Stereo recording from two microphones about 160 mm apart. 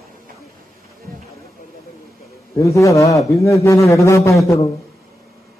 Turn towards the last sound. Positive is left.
turn(degrees=20)  # may be behind; listen again after turning